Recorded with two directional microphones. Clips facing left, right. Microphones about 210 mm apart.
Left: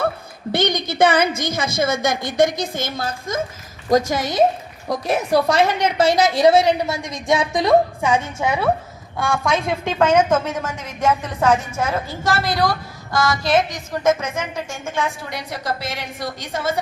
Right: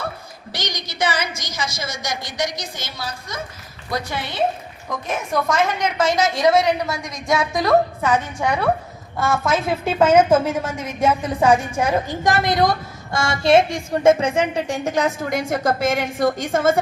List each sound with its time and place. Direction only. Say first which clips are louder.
0.5 s a woman's voice: left 10 dB; 55° left (ahead or behind); by 8.1 s 15° left (ahead or behind)
8.4 s a woman's voice: even; 5° left (ahead or behind); by 16.8 s 50° right (ahead or behind)